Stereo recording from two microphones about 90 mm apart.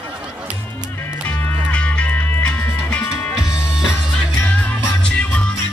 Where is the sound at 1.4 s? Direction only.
20° left (ahead or behind).